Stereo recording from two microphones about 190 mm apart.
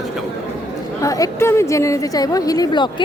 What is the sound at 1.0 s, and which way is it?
A woman's voice, 15° left (ahead or behind).